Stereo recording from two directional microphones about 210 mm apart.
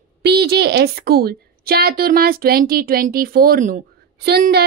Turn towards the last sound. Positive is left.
turn(degrees=-50)  # may be behind; listen again after turning